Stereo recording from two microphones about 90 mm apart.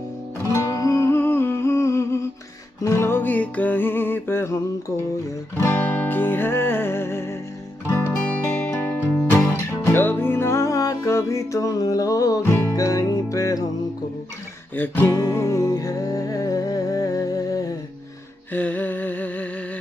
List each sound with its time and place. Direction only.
0.5 s music: 35° left (ahead or behind)
15.0 s music: 30° left (ahead or behind)
18.5 s humming: 15° left (ahead or behind)